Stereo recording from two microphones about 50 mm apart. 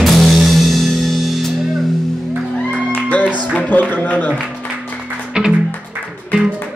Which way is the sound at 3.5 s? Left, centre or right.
Left.